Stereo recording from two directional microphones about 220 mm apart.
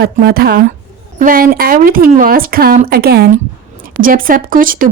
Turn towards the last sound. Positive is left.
turn(degrees=-40)  # may be behind; listen again after turning